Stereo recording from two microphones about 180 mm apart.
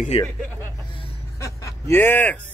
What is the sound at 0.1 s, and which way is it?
Speech, 35° left (ahead or behind).